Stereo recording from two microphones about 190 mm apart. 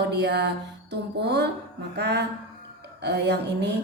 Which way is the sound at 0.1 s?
60° right (ahead or behind).